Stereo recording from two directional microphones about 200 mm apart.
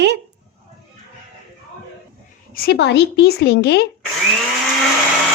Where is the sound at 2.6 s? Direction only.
55° left (ahead or behind).